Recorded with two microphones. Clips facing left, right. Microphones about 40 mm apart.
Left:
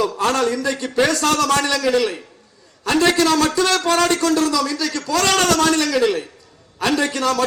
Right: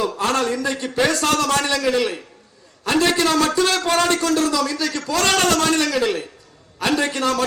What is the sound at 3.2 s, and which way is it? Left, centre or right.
A man's voice, right.